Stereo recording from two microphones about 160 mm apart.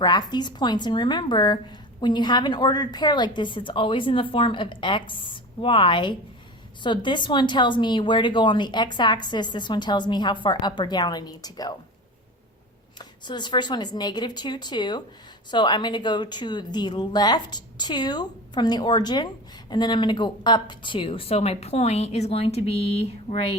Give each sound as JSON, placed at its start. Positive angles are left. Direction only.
{"t": 0.0, "sound": "a woman's voice", "side_deg": 25}
{"t": 13.0, "sound": "a woman's voice", "side_deg": 30}